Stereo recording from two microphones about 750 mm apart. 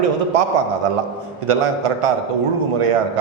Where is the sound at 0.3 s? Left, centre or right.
Right.